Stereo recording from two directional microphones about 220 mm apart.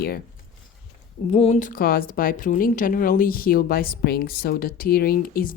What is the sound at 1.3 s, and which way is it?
A woman's voice, 30° left (ahead or behind).